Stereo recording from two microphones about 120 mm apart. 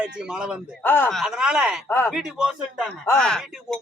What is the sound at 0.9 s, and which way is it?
Speech, 15° left (ahead or behind).